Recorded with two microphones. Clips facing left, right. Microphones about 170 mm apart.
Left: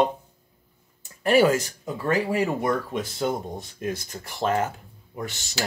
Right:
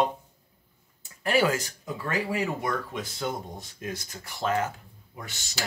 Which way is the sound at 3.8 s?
50° left (ahead or behind).